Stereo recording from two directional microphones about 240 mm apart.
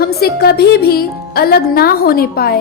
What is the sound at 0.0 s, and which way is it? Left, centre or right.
Speech, left.